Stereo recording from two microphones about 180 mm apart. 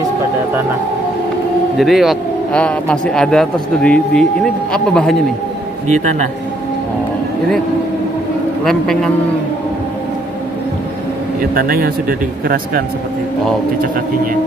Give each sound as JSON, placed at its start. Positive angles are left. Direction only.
{"t": 1.8, "sound": "speech", "side_deg": 0}
{"t": 8.6, "sound": "speech", "side_deg": 5}
{"t": 11.5, "sound": "speech", "side_deg": -55}